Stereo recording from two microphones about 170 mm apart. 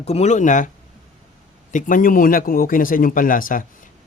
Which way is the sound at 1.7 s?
50° left (ahead or behind).